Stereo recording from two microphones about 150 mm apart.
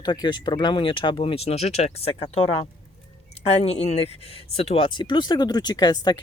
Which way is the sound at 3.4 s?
45° left (ahead or behind).